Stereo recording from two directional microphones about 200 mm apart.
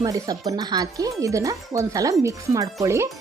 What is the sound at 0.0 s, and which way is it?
A woman's voice, 15° right (ahead or behind).